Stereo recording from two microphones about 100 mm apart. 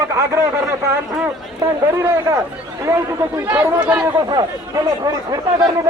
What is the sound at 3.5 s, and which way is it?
Speech, 15° right (ahead or behind).